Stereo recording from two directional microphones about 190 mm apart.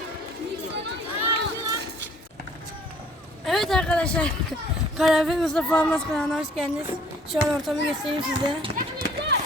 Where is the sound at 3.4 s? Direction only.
Centre (ahead or behind).